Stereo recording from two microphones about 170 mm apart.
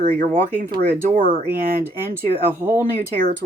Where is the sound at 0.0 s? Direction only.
45° right (ahead or behind).